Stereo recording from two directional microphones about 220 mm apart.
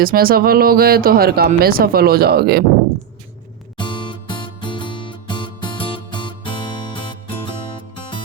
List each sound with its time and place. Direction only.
0.0 s speech: 40° right (ahead or behind)
3.8 s music: 20° left (ahead or behind)